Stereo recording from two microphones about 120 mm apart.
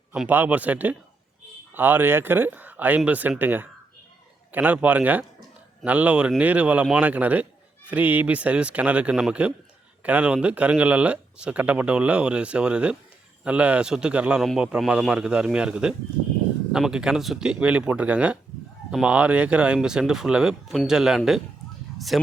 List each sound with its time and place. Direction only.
0.3 s speech: 15° right (ahead or behind)